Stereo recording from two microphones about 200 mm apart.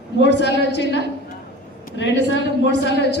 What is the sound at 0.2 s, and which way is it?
Speech, 60° left (ahead or behind).